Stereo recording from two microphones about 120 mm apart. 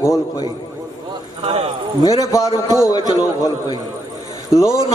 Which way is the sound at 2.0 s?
30° left (ahead or behind).